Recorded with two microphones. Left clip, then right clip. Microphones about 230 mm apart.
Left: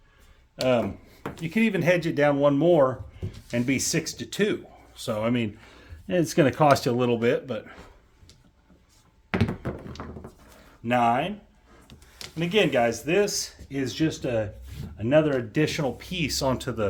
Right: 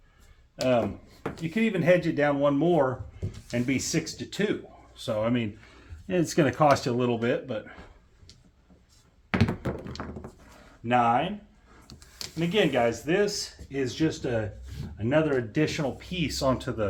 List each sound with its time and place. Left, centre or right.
0.5 s speech: left
9.3 s thunk: centre
10.0 s a sound: centre
10.8 s speech: left
12.4 s speech: left